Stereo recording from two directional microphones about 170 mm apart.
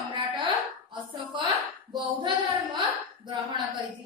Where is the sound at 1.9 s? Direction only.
25° right (ahead or behind).